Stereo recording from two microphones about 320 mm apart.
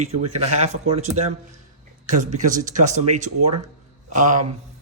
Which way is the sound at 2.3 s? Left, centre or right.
Right.